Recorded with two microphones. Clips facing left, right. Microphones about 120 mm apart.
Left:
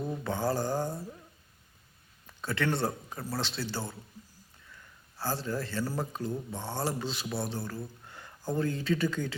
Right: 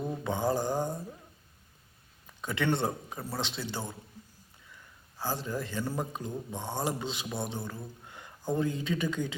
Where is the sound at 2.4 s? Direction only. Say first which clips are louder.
Right 1 dB; 15° right (ahead or behind).